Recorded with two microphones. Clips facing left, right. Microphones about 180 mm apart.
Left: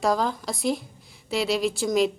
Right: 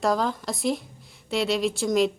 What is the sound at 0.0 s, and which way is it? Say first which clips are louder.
A woman's voice: even; centre (ahead or behind).